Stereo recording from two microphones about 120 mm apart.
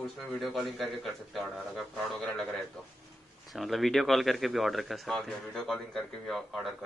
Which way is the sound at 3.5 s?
Centre (ahead or behind).